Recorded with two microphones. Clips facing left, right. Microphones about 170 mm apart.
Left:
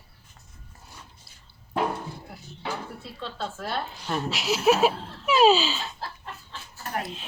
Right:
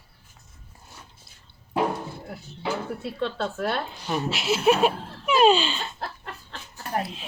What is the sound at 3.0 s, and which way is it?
Speech, 65° right (ahead or behind).